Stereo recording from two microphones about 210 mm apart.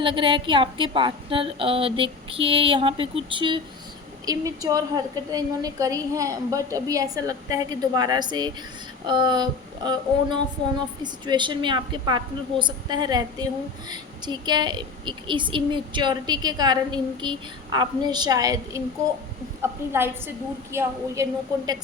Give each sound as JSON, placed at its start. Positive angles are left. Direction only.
{"t": 0.0, "sound": "a woman's voice", "side_deg": -25}